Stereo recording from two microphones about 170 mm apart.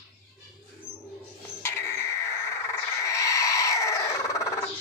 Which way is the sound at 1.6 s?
15° left (ahead or behind).